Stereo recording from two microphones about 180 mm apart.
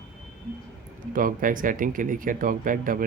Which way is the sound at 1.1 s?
50° right (ahead or behind).